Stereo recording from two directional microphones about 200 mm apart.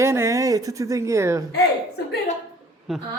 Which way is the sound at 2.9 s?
Centre (ahead or behind).